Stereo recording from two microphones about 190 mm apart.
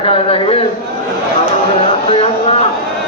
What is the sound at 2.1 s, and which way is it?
Speech, 30° left (ahead or behind).